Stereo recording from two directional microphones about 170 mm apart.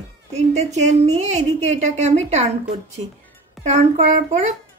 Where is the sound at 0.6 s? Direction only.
40° right (ahead or behind).